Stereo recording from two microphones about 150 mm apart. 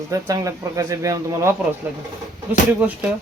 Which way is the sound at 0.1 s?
20° right (ahead or behind).